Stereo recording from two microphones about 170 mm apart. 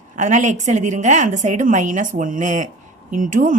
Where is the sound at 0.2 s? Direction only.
45° right (ahead or behind).